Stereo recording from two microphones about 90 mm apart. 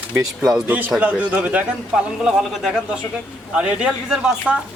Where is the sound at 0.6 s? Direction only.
20° right (ahead or behind).